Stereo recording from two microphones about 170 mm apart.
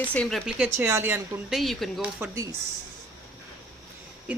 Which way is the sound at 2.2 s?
15° right (ahead or behind).